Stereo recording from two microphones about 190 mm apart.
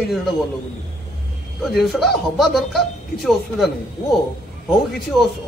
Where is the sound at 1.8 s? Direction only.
Centre (ahead or behind).